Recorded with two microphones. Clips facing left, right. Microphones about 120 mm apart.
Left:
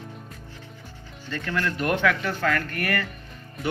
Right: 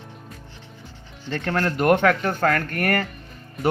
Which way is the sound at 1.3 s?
50° right (ahead or behind).